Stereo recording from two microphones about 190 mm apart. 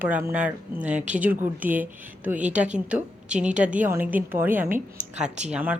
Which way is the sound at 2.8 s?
5° right (ahead or behind).